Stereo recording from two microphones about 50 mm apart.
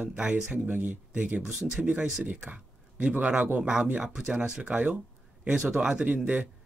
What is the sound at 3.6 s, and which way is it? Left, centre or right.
Speech, centre.